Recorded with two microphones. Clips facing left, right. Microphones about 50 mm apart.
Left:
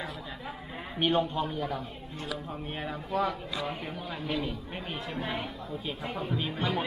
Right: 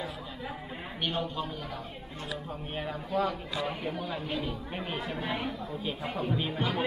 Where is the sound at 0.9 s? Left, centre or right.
Left.